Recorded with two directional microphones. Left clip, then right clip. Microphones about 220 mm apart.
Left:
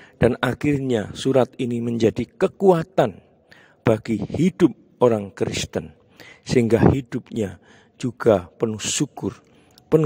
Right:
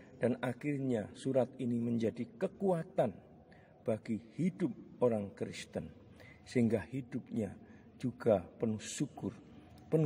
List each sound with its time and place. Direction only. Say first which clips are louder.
0.0 s speech: left 15 dB; 50° left (ahead or behind)